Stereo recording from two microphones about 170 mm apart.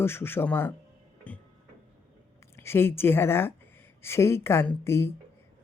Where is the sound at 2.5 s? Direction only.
15° left (ahead or behind).